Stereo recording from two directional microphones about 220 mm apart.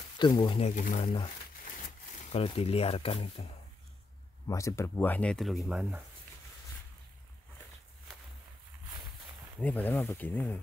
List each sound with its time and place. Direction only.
0.2 s speech: 20° left (ahead or behind)
2.3 s speech: 25° left (ahead or behind)
4.5 s speech: 15° left (ahead or behind); by 6.0 s 5° right (ahead or behind)
9.6 s speech: 5° left (ahead or behind)